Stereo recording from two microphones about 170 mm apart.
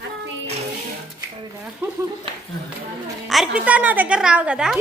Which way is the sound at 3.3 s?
5° right (ahead or behind).